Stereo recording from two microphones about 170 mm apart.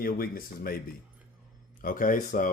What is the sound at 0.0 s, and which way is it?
Speech, 60° left (ahead or behind).